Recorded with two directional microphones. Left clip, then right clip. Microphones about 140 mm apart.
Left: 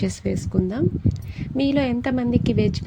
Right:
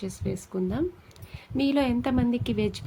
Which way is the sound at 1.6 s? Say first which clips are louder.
Left 3 dB; 25° left (ahead or behind).